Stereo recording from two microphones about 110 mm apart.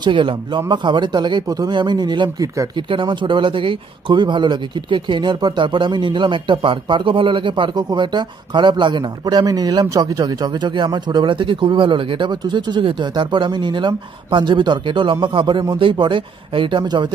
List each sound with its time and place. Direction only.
0.0 s speech: 50° right (ahead or behind)
2.4 s speech: 30° right (ahead or behind)
2.9 s speech: 50° right (ahead or behind)